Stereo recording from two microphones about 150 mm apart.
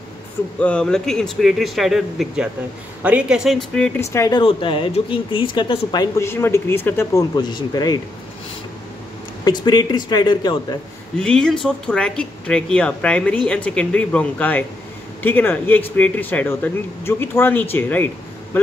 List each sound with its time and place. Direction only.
0.6 s speech: 10° left (ahead or behind)
4.1 s speech: 20° left (ahead or behind)
4.4 s speech: 35° left (ahead or behind)
6.1 s speech: 15° left (ahead or behind)
7.3 s speech: 25° left (ahead or behind)
9.4 s speech: 30° left (ahead or behind)
11.1 s speech: 5° left (ahead or behind)